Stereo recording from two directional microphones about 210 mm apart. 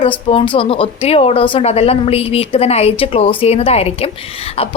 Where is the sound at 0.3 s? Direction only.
25° left (ahead or behind).